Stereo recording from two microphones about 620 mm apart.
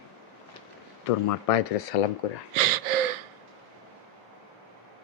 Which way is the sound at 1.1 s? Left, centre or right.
Left.